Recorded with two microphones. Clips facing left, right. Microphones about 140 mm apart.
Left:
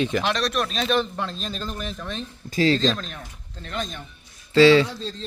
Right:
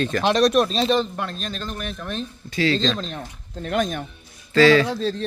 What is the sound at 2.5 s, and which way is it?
Speech, 40° left (ahead or behind).